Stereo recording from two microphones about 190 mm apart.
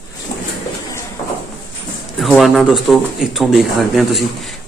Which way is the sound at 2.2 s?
Centre (ahead or behind).